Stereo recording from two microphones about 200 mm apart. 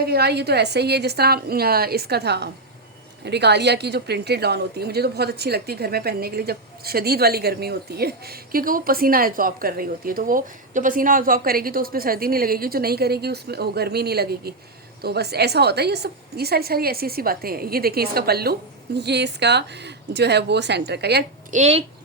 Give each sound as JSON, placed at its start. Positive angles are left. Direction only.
{"t": 0.0, "sound": "a woman's voice", "side_deg": -55}
{"t": 21.5, "sound": "speech", "side_deg": -30}